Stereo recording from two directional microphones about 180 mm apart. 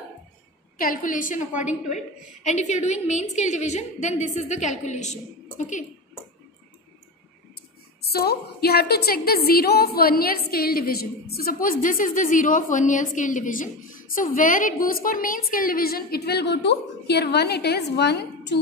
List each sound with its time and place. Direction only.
0.7 s a woman's voice: 50° left (ahead or behind)
8.0 s a woman's voice: 60° left (ahead or behind)